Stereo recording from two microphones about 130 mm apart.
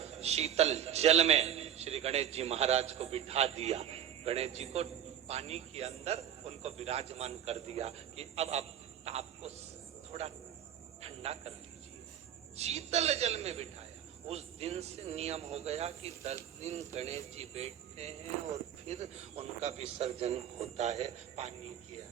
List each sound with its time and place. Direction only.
0.0 s a man's voice: 55° right (ahead or behind)
11.0 s music: 55° right (ahead or behind)
12.5 s a man's voice: 55° right (ahead or behind)